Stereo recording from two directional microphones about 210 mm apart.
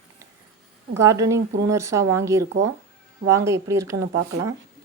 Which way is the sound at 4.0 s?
80° right.